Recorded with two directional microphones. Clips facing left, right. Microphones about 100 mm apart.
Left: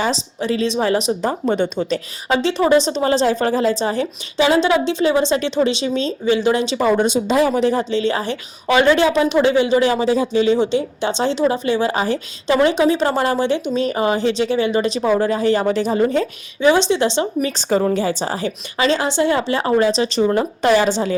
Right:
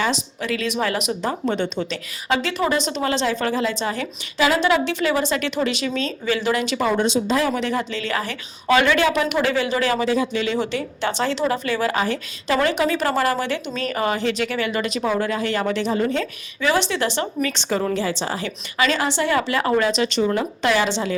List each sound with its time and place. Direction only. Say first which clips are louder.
0.0 s a woman's voice: left 3 dB; 30° left (ahead or behind)
1.5 s speech: left 5 dB; 15° left (ahead or behind)
1.9 s a woman's voice: left 4 dB; 30° left (ahead or behind)
7.0 s speech: left 4 dB; 50° left (ahead or behind)
7.5 s a woman's voice: left 6 dB; 35° left (ahead or behind)